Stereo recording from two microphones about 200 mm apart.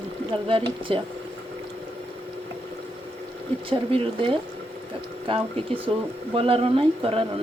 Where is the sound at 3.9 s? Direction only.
25° right (ahead or behind).